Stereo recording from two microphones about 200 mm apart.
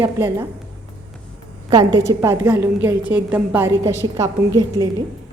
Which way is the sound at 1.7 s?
20° right (ahead or behind).